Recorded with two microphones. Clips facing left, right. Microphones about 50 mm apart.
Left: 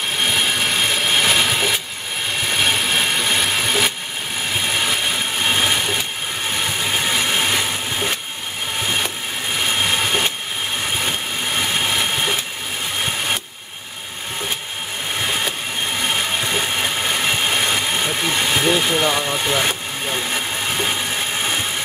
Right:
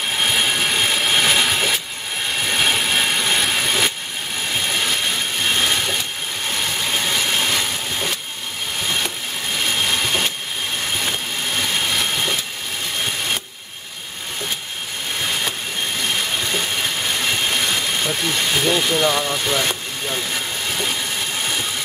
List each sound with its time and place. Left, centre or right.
0.2 s wood: centre
4.6 s vehicle: centre
6.8 s wood: centre
9.6 s a sound: centre
11.1 s vehicle: centre
16.0 s vehicle: centre